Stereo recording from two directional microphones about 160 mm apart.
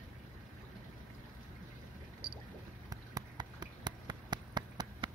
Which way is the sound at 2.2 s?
75° right (ahead or behind).